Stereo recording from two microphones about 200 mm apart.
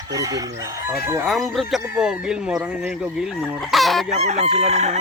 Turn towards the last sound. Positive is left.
turn(degrees=-35)  # may be behind; listen again after turning